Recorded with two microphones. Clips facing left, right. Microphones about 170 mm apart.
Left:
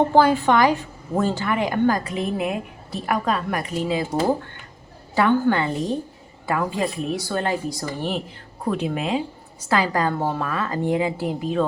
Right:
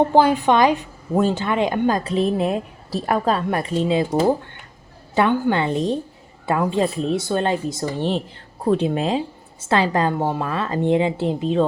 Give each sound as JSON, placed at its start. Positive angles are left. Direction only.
{"t": 0.1, "sound": "a woman's voice", "side_deg": -15}